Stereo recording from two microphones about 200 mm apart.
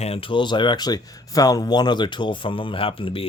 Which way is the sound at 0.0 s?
30° left (ahead or behind).